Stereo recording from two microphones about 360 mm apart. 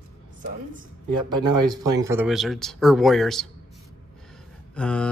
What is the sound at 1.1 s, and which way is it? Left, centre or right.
Speech, right.